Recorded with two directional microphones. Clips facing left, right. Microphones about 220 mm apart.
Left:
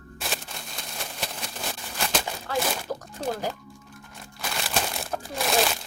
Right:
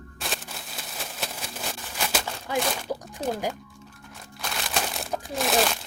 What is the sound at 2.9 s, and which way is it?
Speech, 10° right (ahead or behind).